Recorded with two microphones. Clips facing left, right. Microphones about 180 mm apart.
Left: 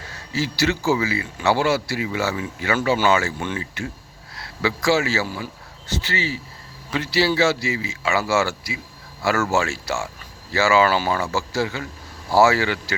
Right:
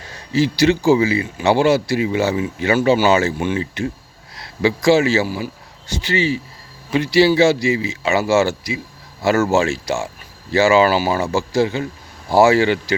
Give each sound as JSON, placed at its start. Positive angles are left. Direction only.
{"t": 0.1, "sound": "a man's voice", "side_deg": -20}